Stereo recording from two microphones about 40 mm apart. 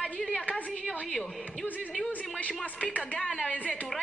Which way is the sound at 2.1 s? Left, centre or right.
Left.